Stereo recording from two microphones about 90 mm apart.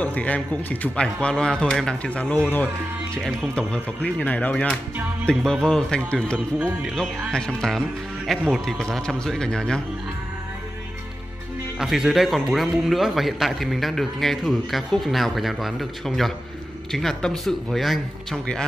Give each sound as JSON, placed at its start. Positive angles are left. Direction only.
{"t": 0.0, "sound": "speech", "side_deg": 15}
{"t": 1.0, "sound": "speech", "side_deg": 5}
{"t": 3.2, "sound": "a man's voice", "side_deg": 5}
{"t": 11.8, "sound": "a man's voice", "side_deg": -5}